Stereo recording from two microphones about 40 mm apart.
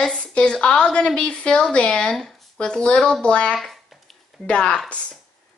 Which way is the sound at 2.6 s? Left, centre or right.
Left.